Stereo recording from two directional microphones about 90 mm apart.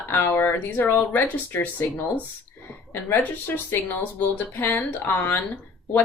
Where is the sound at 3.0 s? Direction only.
20° left (ahead or behind).